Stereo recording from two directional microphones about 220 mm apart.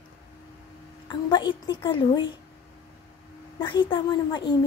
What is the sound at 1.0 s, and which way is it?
A woman's voice, 20° left (ahead or behind).